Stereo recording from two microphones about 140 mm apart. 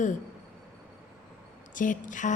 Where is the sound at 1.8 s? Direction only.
70° left (ahead or behind).